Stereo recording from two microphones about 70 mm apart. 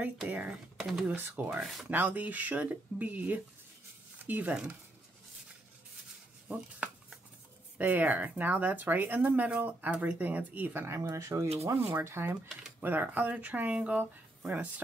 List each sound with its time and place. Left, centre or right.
0.0 s speech: right
1.5 s speech: centre
1.9 s speech: right
7.7 s speech: right
11.0 s speech: right
12.8 s speech: right